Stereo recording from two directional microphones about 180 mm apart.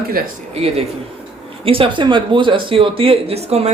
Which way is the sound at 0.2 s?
55° right (ahead or behind).